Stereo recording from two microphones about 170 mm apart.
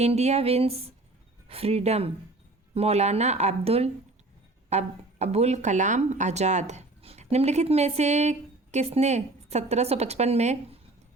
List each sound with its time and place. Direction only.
0.0 s speech: 40° right (ahead or behind)